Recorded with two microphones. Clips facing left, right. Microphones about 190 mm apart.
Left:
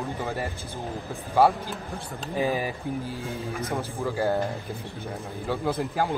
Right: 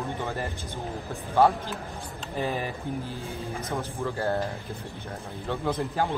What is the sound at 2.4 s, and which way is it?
Speech, 10° left (ahead or behind).